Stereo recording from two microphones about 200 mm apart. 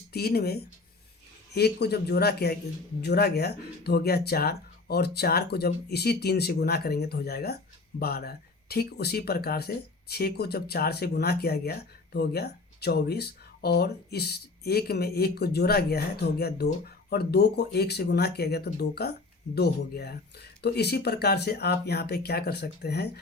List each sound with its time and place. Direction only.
0.1 s speech: 50° left (ahead or behind)